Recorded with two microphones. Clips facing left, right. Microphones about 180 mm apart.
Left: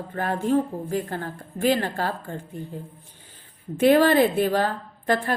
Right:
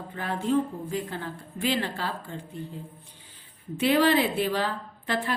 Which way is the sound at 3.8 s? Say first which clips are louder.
Left 5 dB; 50° left (ahead or behind).